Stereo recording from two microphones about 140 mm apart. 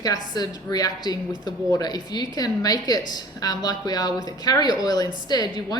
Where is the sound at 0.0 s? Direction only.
25° left (ahead or behind).